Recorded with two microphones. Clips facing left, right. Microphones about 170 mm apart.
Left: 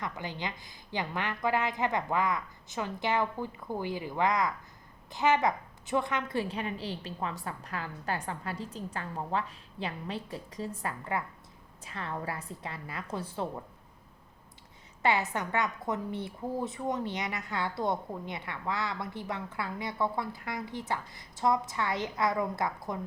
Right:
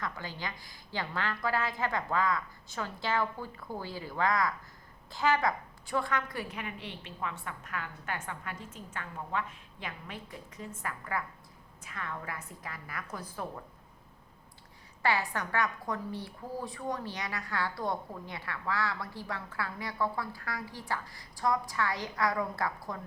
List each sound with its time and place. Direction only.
0.0 s a woman's voice: 20° left (ahead or behind)
15.0 s a woman's voice: 20° left (ahead or behind)